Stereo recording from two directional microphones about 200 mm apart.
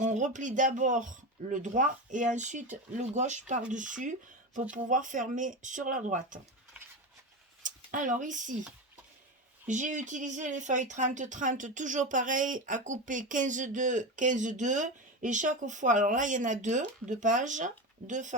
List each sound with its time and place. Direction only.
0.0 s speech: 40° right (ahead or behind)
7.6 s speech: 40° right (ahead or behind)
9.6 s speech: 40° right (ahead or behind)